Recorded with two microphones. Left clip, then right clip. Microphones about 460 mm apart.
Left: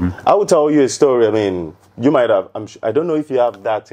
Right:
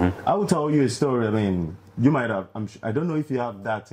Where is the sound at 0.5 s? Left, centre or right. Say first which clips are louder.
Left 10 dB; left.